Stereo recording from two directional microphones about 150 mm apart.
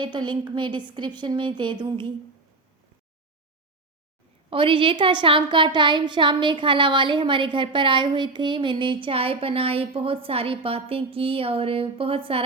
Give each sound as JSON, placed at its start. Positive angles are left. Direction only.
{"t": 0.0, "sound": "a woman's voice", "side_deg": -30}
{"t": 4.4, "sound": "a woman's voice", "side_deg": -35}